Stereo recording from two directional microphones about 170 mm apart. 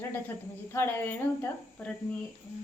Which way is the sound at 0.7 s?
15° left (ahead or behind).